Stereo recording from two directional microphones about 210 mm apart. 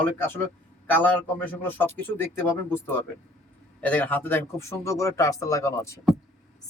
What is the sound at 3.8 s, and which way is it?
Speech, 10° left (ahead or behind).